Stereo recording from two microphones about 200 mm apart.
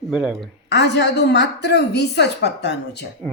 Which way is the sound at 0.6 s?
60° left (ahead or behind).